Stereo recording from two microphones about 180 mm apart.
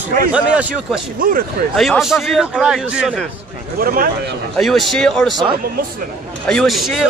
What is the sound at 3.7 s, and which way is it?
Speech, 50° right (ahead or behind).